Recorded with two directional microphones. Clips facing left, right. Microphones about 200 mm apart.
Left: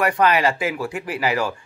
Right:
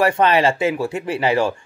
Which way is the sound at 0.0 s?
25° right (ahead or behind).